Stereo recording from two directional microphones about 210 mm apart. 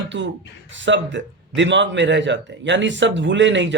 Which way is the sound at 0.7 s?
60° right (ahead or behind).